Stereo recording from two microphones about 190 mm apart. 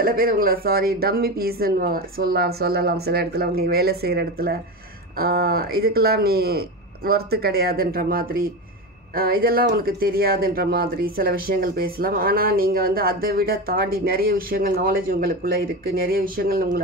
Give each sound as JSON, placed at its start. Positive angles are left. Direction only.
{"t": 0.0, "sound": "speech", "side_deg": -50}